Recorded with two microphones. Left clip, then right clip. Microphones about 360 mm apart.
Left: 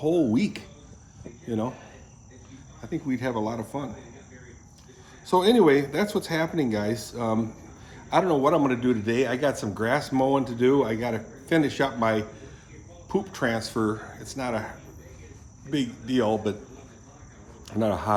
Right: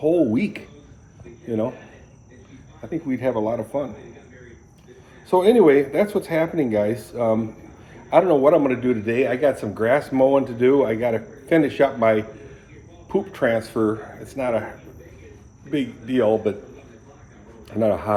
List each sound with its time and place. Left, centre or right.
0.0 s speech: centre
3.2 s speech: centre
5.3 s speech: centre
13.1 s speech: centre
15.7 s speech: centre
17.7 s speech: centre